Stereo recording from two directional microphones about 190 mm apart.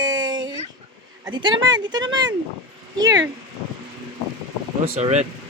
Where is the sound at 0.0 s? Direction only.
20° right (ahead or behind).